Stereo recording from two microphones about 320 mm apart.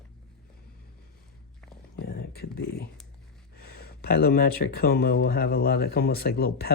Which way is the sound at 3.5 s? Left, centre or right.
Left.